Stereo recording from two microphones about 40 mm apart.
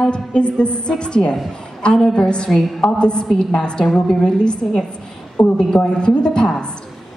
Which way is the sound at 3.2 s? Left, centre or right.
Centre.